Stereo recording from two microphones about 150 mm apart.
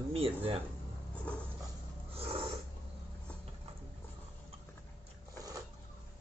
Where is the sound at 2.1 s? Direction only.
40° right (ahead or behind).